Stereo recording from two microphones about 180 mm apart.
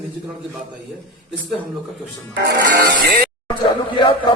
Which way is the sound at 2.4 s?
65° right (ahead or behind).